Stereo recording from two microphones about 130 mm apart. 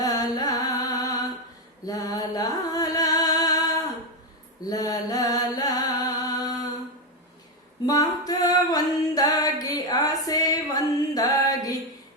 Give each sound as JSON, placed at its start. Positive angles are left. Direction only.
{"t": 0.0, "sound": "carnatic music", "side_deg": 30}
{"t": 1.9, "sound": "music", "side_deg": 30}
{"t": 4.6, "sound": "mantra", "side_deg": 30}
{"t": 7.9, "sound": "female singing", "side_deg": 30}